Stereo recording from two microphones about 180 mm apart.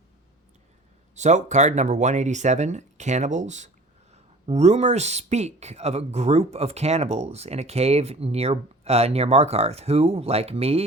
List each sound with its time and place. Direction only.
1.1 s speech: 40° right (ahead or behind)